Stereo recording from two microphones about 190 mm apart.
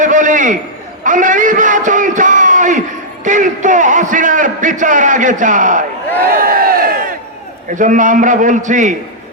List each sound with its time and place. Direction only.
0.0 s a sound: 40° right (ahead or behind)
1.0 s a man's voice: 45° right (ahead or behind)
6.4 s crowd: 50° right (ahead or behind)
7.8 s a man's voice: 40° right (ahead or behind)